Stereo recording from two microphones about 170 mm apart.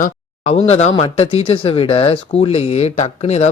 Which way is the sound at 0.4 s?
40° left (ahead or behind).